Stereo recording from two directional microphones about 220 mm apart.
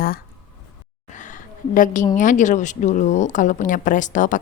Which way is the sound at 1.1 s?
35° left (ahead or behind).